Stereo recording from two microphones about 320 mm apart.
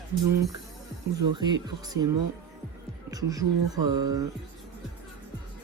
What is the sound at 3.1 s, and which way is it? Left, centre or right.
Speech, centre.